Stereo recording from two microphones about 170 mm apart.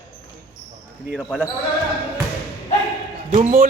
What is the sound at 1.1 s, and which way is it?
Speech, centre (ahead or behind).